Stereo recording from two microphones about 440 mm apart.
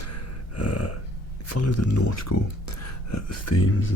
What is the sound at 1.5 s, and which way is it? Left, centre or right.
Speech, left.